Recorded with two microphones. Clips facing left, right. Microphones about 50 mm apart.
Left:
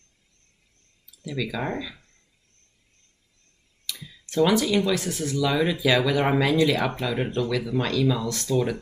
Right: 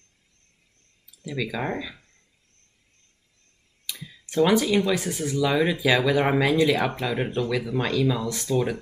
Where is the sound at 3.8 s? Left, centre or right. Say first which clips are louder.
Even; centre.